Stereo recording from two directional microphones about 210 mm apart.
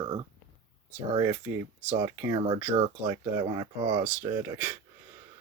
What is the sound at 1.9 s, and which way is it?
Speech, 20° right (ahead or behind).